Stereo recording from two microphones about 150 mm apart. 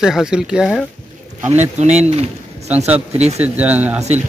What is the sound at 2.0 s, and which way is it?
Speech, 45° right (ahead or behind).